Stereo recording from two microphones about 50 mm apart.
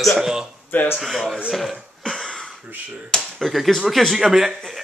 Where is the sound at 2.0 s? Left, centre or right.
Centre.